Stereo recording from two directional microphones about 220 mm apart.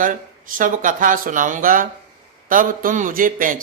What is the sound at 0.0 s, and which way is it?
Music, 35° right (ahead or behind).